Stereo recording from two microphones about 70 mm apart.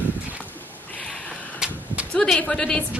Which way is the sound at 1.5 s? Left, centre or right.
Centre.